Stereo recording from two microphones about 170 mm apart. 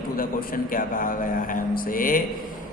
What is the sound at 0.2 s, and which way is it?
A man's voice, 55° left (ahead or behind).